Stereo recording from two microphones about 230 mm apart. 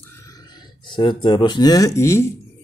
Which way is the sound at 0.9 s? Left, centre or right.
Left.